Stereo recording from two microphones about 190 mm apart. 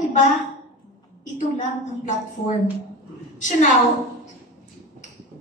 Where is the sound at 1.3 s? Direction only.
40° left (ahead or behind).